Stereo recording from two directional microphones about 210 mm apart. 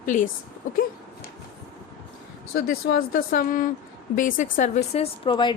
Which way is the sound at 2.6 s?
45° left (ahead or behind).